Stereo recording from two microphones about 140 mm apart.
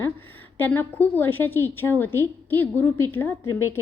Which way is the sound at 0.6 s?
15° left (ahead or behind).